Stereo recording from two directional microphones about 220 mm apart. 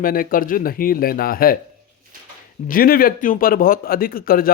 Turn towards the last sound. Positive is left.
turn(degrees=40)  # may be behind; listen again after turning